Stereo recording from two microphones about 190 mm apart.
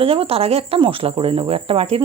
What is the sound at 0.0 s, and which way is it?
Speech, 30° right (ahead or behind).